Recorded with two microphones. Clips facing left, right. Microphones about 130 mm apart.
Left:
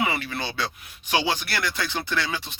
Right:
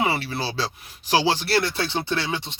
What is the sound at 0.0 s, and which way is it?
Speech, 35° right (ahead or behind).